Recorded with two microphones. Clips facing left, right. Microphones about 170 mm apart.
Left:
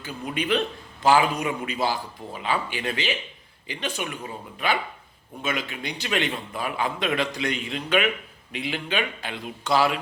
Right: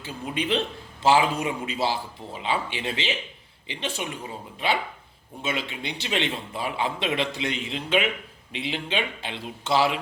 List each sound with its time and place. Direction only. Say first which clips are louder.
0.0 s a man's voice: even; 25° right (ahead or behind)
5.4 s a man's voice: left 1 dB; 25° right (ahead or behind)